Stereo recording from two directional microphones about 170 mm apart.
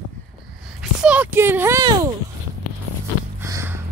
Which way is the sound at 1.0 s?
10° right (ahead or behind).